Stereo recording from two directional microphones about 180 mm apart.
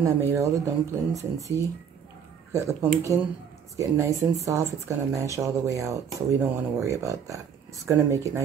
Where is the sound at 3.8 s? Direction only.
15° right (ahead or behind).